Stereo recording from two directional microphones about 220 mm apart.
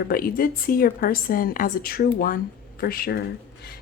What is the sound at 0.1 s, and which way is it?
A woman's voice, 40° left (ahead or behind).